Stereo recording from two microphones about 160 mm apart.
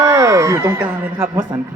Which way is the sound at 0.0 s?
15° right (ahead or behind).